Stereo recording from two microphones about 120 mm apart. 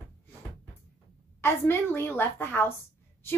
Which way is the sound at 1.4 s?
20° left (ahead or behind).